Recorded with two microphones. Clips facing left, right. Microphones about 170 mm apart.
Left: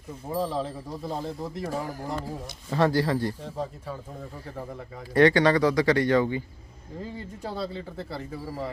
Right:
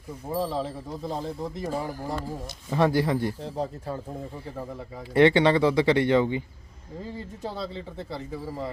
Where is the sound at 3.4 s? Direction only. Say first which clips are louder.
Right 3 dB; 35° right (ahead or behind).